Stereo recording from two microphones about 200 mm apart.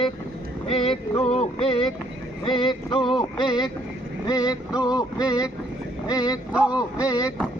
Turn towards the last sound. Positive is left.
turn(degrees=20)  # may be behind; listen again after turning